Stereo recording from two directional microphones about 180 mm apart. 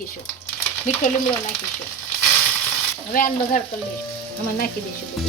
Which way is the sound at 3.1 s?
50° left (ahead or behind).